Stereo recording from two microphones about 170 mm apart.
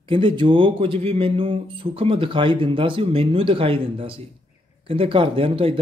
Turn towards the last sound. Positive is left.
turn(degrees=-30)  # may be behind; listen again after turning